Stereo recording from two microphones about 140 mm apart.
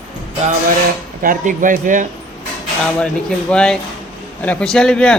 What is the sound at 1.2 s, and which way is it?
Speech, 80° right.